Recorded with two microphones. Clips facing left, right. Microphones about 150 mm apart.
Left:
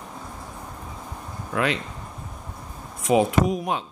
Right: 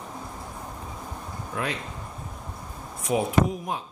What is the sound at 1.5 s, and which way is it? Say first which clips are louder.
Speech: left 6 dB; 90° left.